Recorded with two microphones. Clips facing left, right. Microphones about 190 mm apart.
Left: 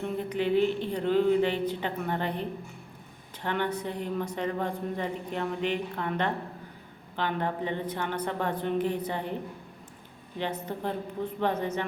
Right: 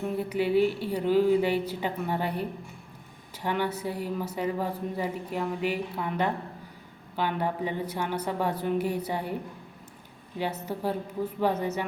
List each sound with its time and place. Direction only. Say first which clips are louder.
0.0 s speech: right 1 dB; 10° right (ahead or behind)